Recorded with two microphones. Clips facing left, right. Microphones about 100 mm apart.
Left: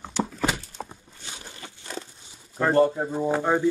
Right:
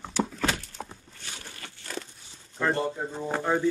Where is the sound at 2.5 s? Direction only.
10° left (ahead or behind).